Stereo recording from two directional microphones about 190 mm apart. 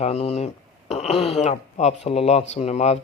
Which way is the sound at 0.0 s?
35° left (ahead or behind).